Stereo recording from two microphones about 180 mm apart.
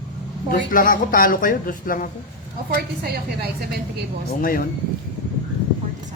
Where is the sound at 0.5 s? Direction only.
50° left (ahead or behind).